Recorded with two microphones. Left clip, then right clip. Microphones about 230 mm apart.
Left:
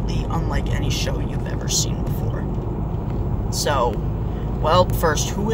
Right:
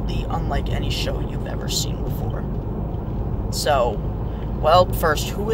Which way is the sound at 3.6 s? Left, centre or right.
Centre.